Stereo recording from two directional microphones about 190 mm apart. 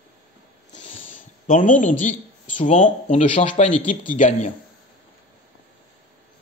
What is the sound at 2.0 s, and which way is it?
Speech, 40° left (ahead or behind).